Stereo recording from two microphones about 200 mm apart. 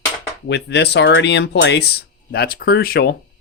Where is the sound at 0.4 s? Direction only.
60° left (ahead or behind).